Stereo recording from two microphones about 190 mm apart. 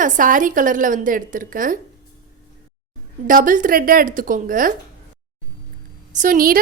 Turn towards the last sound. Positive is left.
turn(degrees=-50)  # may be behind; listen again after turning